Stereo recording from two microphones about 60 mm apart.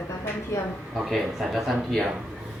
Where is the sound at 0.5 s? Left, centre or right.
Left.